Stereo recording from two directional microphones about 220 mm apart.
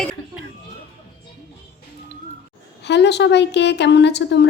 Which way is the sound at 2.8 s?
50° left (ahead or behind).